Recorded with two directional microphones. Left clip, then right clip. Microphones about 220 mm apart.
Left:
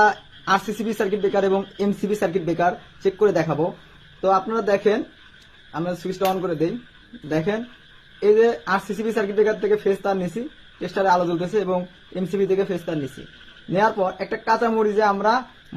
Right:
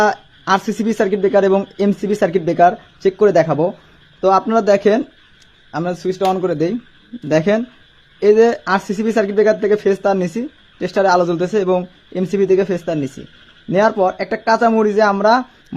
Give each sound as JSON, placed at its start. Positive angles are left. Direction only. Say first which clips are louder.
{"t": 0.0, "sound": "speech", "louder": "right 2 dB", "side_deg": -40}